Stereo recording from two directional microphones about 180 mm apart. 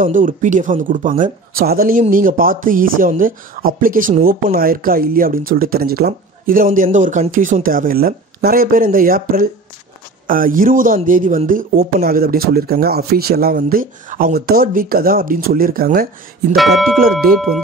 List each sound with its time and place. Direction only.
0.0 s speech: 45° right (ahead or behind)
16.5 s speech: centre (ahead or behind)